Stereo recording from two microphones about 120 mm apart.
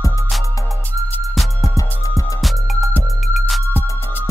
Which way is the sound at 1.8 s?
30° left (ahead or behind).